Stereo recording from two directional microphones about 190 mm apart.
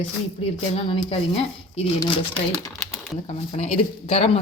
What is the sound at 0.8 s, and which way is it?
Speech, 25° left (ahead or behind).